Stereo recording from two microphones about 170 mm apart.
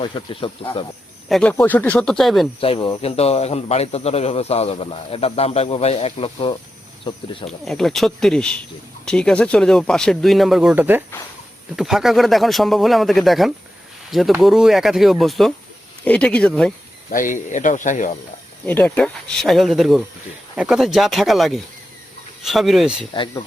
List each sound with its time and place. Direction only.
0.0 s speech: 30° left (ahead or behind)
1.3 s speech: 5° left (ahead or behind)
2.6 s speech: 30° left (ahead or behind)
7.6 s speech: centre (ahead or behind)
17.1 s speech: 50° left (ahead or behind)
18.6 s speech: 10° left (ahead or behind)